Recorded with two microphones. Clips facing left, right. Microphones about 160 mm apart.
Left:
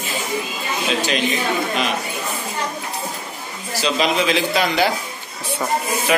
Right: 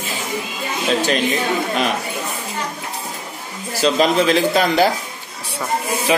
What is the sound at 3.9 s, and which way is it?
Speech, 40° right (ahead or behind).